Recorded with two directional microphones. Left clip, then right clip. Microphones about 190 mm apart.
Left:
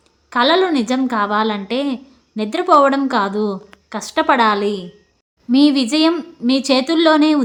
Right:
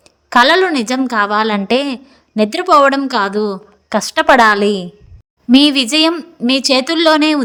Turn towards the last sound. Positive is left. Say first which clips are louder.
# right 2 dB
turn(degrees=-35)  # may be behind; listen again after turning